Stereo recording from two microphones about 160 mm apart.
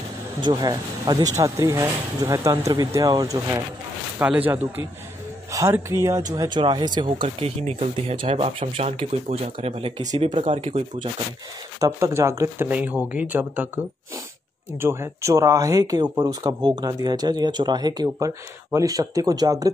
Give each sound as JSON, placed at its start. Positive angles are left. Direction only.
{"t": 0.4, "sound": "speech", "side_deg": -25}
{"t": 4.2, "sound": "speech", "side_deg": -10}
{"t": 10.5, "sound": "speech", "side_deg": -45}
{"t": 11.8, "sound": "speech", "side_deg": -15}
{"t": 14.8, "sound": "speech", "side_deg": -15}